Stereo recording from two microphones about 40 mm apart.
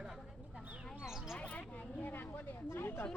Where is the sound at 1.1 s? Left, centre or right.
Centre.